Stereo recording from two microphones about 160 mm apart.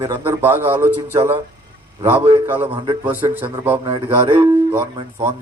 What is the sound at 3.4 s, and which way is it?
Speech, 10° right (ahead or behind).